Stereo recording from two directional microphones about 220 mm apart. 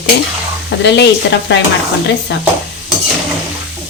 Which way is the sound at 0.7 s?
50° left (ahead or behind).